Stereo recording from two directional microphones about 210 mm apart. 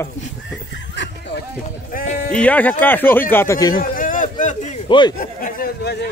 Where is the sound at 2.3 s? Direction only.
5° left (ahead or behind).